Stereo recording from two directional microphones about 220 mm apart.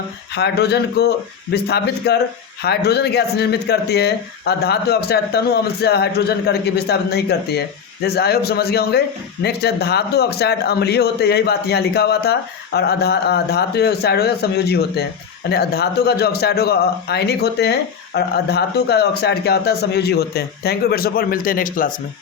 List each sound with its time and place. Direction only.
0.3 s a man's voice: 50° left (ahead or behind)